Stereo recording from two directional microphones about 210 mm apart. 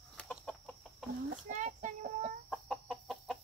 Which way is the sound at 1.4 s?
35° right (ahead or behind).